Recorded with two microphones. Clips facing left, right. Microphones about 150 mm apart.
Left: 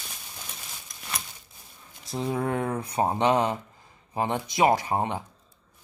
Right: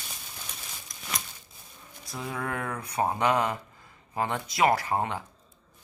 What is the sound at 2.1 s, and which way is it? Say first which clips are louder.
Speech: left 6 dB; 25° left (ahead or behind).